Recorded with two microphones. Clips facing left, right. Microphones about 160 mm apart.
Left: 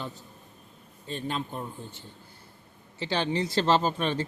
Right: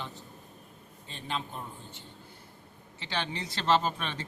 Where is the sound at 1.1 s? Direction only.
45° left (ahead or behind).